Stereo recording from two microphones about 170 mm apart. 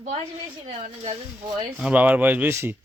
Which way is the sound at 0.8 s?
40° right (ahead or behind).